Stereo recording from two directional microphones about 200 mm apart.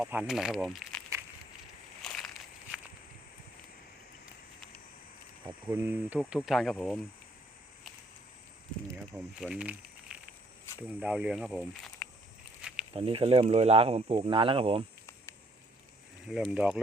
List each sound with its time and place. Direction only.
0.0 s speech: 5° right (ahead or behind)
2.0 s crushing: centre (ahead or behind)
5.5 s speech: 10° right (ahead or behind)
9.4 s a sound: 5° right (ahead or behind)
10.8 s speech: 5° right (ahead or behind)
12.9 s speech: 30° right (ahead or behind)
16.2 s speech: centre (ahead or behind)